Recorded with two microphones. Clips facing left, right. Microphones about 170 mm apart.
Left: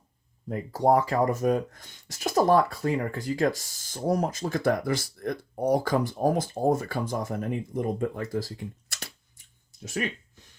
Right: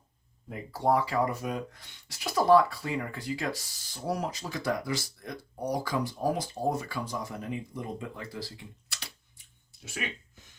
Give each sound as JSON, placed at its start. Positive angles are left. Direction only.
{"t": 0.4, "sound": "speech", "side_deg": 40}